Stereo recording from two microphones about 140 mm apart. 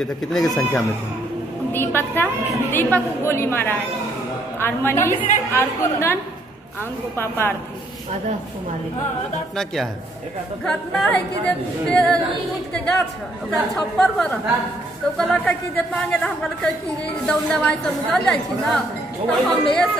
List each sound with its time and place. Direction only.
0.0 s speech: 5° left (ahead or behind)
1.7 s a man's voice: 15° left (ahead or behind)
7.2 s a man's voice: 15° left (ahead or behind)
10.6 s speech: 5° left (ahead or behind)
13.5 s a man's voice: 5° left (ahead or behind)